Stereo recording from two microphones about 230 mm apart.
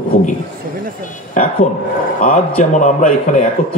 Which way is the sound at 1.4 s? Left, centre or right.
Left.